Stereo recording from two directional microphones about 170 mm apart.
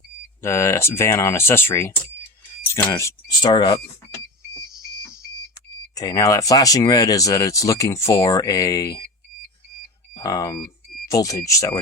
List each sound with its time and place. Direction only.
0.4 s speech: 15° left (ahead or behind)
5.9 s speech: 20° left (ahead or behind)
10.2 s speech: 20° left (ahead or behind)